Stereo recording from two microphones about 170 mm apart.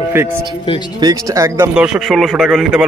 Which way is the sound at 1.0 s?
20° right (ahead or behind).